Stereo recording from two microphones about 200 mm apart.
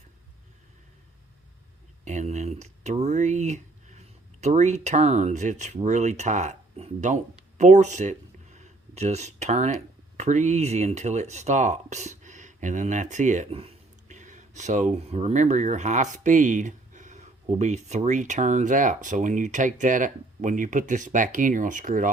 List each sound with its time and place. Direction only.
2.0 s speech: 35° right (ahead or behind)